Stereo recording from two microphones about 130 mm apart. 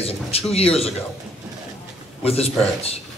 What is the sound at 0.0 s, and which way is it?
Speech, 50° left (ahead or behind).